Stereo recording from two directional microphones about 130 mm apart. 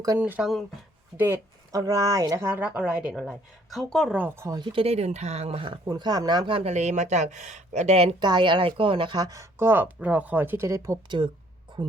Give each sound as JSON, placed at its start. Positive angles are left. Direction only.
{"t": 0.2, "sound": "speech", "side_deg": -10}
{"t": 4.1, "sound": "speech", "side_deg": -15}
{"t": 4.5, "sound": "speech", "side_deg": -40}
{"t": 8.2, "sound": "a woman's voice", "side_deg": -35}